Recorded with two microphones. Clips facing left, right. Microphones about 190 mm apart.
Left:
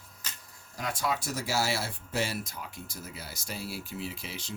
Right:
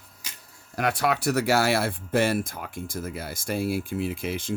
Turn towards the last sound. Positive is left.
turn(degrees=-50)  # may be behind; listen again after turning